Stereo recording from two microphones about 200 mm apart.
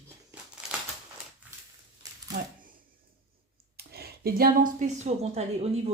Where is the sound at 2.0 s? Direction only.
20° right (ahead or behind).